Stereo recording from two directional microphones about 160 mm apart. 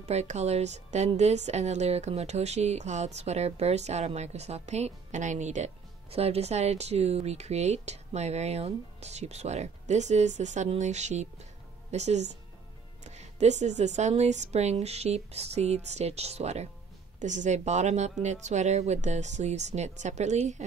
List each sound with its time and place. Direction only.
0.0 s a woman's voice: 45° right (ahead or behind)